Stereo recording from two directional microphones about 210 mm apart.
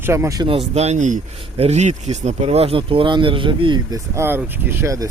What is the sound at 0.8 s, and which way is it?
Speech, 35° right (ahead or behind).